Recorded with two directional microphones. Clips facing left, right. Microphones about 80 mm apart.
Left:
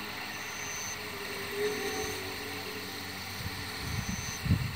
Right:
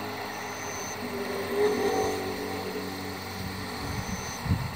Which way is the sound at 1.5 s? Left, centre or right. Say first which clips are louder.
Right 9 dB; right.